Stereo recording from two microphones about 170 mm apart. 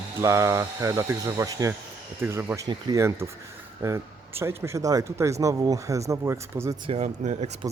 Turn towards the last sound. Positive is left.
turn(degrees=-40)  # may be behind; listen again after turning